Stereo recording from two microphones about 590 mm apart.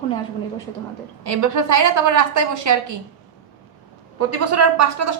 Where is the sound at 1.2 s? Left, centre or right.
Right.